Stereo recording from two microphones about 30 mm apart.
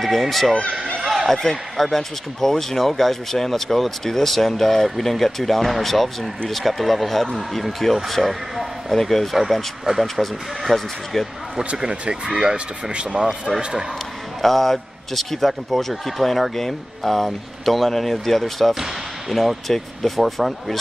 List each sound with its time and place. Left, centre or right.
0.0 s speech: centre
1.0 s a sound: centre
1.3 s a man's voice: centre
10.7 s a man's voice: centre
11.8 s speech: right
14.4 s a man's voice: centre
18.8 s basketball bounce: centre
19.7 s speech: centre